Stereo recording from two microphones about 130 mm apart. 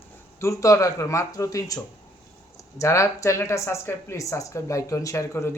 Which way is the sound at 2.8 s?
20° left (ahead or behind).